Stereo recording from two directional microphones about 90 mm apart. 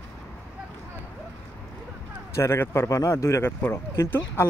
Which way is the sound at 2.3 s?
30° left (ahead or behind).